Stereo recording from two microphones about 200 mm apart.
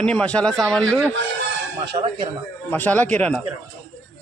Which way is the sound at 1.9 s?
30° right (ahead or behind).